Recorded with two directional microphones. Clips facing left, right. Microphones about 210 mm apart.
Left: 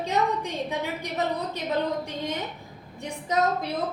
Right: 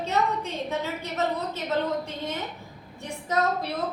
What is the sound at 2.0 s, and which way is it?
Speech, 15° left (ahead or behind).